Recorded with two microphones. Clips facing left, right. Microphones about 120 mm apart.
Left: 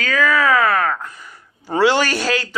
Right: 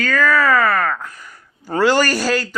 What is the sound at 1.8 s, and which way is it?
Speech, centre (ahead or behind).